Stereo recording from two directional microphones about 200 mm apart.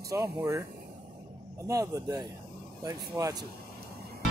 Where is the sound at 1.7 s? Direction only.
15° right (ahead or behind).